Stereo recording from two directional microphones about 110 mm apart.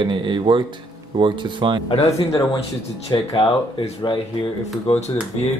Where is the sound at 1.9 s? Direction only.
70° left (ahead or behind).